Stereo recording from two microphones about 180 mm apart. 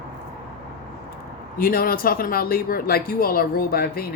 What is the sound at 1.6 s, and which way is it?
Speech, 55° left (ahead or behind).